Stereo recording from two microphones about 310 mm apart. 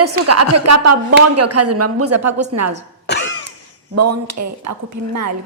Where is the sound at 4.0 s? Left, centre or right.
Right.